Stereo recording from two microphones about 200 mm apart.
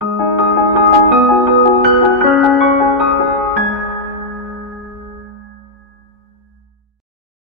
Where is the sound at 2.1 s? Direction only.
Centre (ahead or behind).